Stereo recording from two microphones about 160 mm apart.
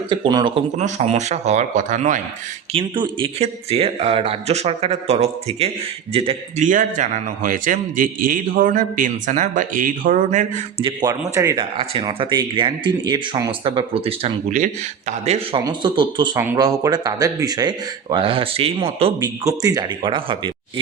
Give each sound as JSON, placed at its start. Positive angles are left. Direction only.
{"t": 0.1, "sound": "speech", "side_deg": -30}
{"t": 0.5, "sound": "a man's voice", "side_deg": -45}
{"t": 2.7, "sound": "speech", "side_deg": -30}
{"t": 6.6, "sound": "a man's voice", "side_deg": -55}
{"t": 10.8, "sound": "speech", "side_deg": -25}
{"t": 14.5, "sound": "a man's voice", "side_deg": -50}
{"t": 15.5, "sound": "speech", "side_deg": -30}
{"t": 19.5, "sound": "speech", "side_deg": -25}